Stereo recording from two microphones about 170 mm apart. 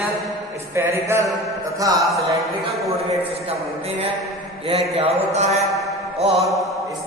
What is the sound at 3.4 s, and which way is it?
Mantra, 35° right (ahead or behind).